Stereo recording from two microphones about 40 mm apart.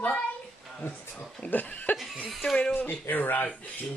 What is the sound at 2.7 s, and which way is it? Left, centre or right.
Speech, left.